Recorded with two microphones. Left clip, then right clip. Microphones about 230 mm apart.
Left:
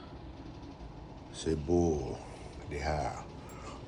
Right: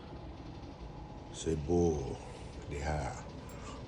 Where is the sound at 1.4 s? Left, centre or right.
Left.